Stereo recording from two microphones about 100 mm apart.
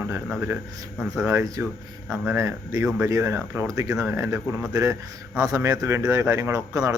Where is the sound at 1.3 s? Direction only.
30° right (ahead or behind).